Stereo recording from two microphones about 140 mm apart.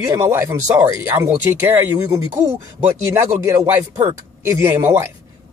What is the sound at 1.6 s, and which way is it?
A man's voice, 20° right (ahead or behind).